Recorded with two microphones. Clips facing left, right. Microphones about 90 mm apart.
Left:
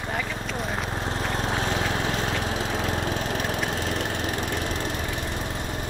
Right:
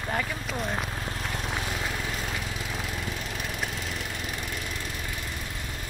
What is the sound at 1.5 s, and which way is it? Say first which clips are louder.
Lawn mower: left 6 dB; 70° left (ahead or behind).